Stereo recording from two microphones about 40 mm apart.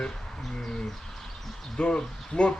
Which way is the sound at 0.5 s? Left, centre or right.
Centre.